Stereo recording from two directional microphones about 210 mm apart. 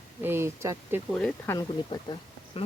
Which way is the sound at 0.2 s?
10° right (ahead or behind).